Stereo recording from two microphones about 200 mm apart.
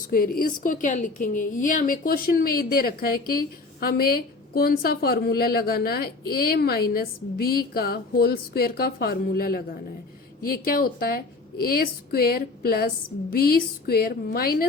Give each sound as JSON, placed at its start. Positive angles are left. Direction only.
{"t": 0.1, "sound": "a woman's voice", "side_deg": 45}